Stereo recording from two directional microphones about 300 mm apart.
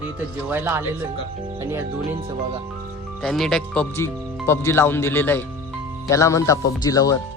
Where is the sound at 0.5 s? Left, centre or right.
Centre.